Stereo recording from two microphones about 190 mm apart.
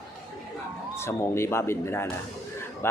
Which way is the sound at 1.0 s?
15° left (ahead or behind).